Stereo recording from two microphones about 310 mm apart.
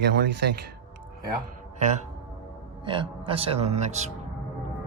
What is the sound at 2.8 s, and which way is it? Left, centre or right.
Speech, centre.